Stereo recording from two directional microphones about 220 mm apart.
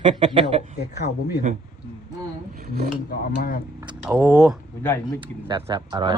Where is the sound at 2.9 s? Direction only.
40° left (ahead or behind).